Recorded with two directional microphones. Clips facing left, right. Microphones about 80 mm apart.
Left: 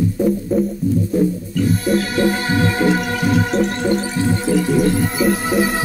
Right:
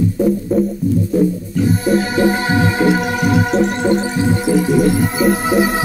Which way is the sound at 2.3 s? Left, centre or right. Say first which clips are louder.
Right 2 dB; centre.